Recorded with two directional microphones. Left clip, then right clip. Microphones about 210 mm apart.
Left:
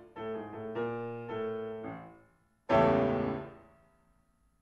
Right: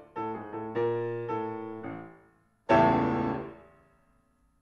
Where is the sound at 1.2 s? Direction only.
25° right (ahead or behind).